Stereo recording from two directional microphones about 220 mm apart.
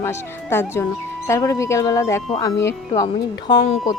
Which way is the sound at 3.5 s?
20° left (ahead or behind).